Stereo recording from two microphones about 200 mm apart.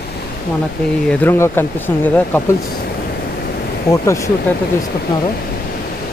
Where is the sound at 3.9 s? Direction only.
15° left (ahead or behind).